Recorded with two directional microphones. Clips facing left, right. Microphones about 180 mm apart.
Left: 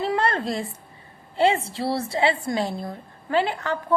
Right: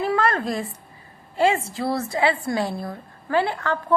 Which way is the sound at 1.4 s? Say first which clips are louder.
Even; 30° left (ahead or behind).